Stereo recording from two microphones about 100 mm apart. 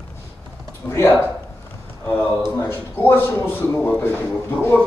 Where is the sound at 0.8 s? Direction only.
20° left (ahead or behind).